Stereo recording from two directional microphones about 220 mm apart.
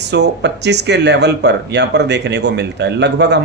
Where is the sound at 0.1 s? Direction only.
50° right (ahead or behind).